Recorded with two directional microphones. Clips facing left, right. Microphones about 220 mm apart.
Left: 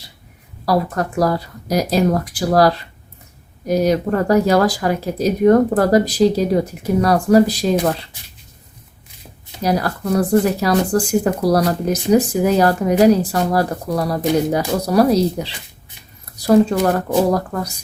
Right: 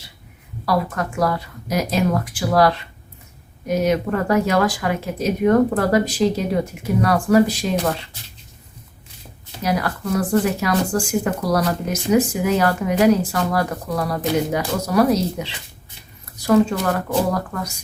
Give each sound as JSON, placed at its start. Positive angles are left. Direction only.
{"t": 0.6, "sound": "speech", "side_deg": 35}
{"t": 9.6, "sound": "speech", "side_deg": 35}